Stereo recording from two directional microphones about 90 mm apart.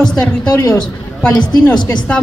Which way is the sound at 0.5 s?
35° left (ahead or behind).